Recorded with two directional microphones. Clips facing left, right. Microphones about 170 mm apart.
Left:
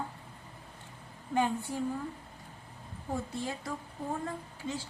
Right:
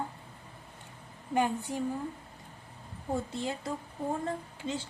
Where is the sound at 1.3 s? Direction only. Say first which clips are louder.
Right 1 dB; 15° right (ahead or behind).